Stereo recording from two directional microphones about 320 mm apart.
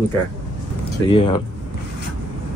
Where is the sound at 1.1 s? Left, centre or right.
Centre.